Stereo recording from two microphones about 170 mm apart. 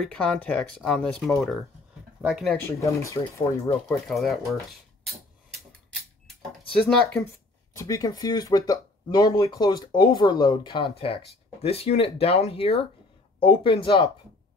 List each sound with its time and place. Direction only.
0.0 s speech: 5° left (ahead or behind)
2.5 s speech: 15° left (ahead or behind)
4.1 s speech: centre (ahead or behind)
6.8 s speech: 5° left (ahead or behind)
7.7 s speech: 20° left (ahead or behind)